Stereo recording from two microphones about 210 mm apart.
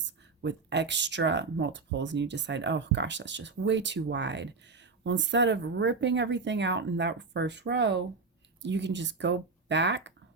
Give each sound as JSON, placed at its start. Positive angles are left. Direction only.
{"t": 0.4, "sound": "speech", "side_deg": -55}